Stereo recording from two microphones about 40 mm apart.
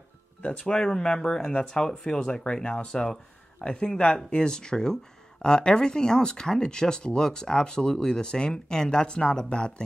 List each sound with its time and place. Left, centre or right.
0.6 s speech: centre
2.9 s speech: centre